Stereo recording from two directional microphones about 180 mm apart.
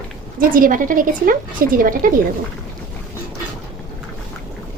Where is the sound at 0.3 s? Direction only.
50° right (ahead or behind).